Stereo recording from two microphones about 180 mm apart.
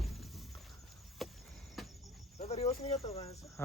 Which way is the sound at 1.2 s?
Centre (ahead or behind).